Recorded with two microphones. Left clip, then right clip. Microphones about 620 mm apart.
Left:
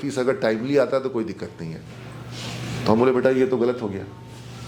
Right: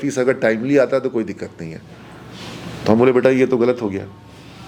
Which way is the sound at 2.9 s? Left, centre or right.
Centre.